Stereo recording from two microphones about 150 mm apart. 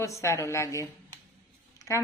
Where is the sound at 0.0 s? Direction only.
20° left (ahead or behind).